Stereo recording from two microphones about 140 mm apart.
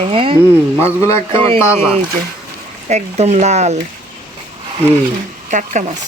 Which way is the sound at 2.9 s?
55° right (ahead or behind).